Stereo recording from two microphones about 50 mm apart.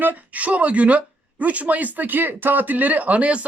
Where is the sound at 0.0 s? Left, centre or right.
Right.